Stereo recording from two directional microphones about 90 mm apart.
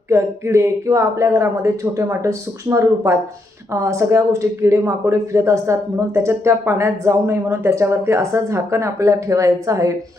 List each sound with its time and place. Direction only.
0.1 s speech: 30° right (ahead or behind)